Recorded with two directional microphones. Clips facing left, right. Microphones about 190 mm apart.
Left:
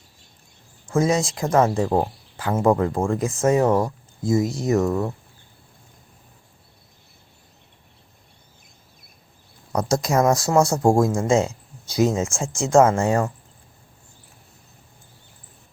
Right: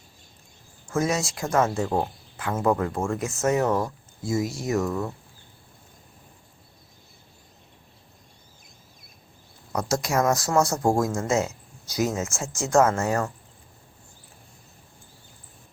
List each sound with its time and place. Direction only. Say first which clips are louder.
0.9 s speech: left 5 dB; 30° left (ahead or behind)
9.7 s speech: left 4 dB; 35° left (ahead or behind)